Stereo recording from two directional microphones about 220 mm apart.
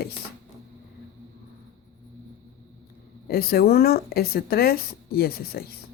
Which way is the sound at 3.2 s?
45° left (ahead or behind).